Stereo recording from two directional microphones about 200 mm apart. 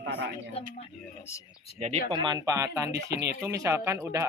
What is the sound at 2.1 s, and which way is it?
Speech, 25° right (ahead or behind).